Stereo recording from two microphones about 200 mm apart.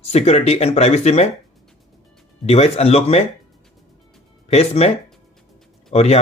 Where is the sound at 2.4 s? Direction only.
30° left (ahead or behind).